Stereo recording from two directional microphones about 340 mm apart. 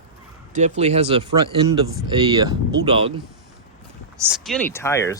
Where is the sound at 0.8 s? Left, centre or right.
Centre.